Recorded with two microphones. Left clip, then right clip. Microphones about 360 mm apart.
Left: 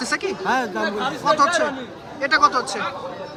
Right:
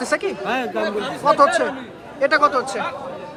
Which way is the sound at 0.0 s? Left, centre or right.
Centre.